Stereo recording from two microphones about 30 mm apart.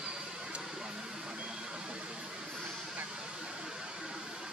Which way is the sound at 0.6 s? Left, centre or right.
Right.